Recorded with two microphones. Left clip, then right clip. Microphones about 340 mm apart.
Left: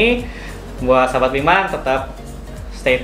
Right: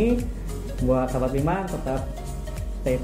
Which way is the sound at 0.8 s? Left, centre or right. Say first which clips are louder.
Left 10 dB; centre.